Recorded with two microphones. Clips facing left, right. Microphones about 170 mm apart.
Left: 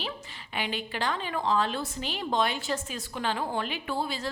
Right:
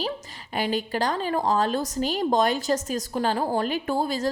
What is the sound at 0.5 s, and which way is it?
A woman's voice, 40° right (ahead or behind).